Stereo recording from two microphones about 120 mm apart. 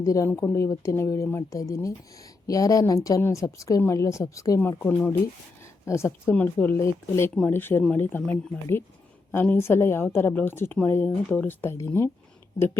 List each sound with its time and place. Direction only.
0.0 s speech: 25° left (ahead or behind)
4.8 s speech: 15° left (ahead or behind)